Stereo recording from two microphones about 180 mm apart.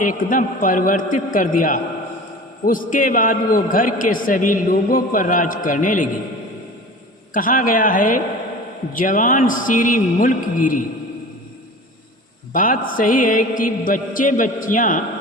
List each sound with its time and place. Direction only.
0.0 s a man's voice: 50° left (ahead or behind)
7.3 s a man's voice: 50° left (ahead or behind)
12.5 s a man's voice: 50° left (ahead or behind)